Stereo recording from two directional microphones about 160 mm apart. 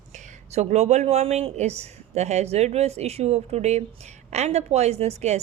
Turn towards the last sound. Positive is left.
turn(degrees=-45)  # may be behind; listen again after turning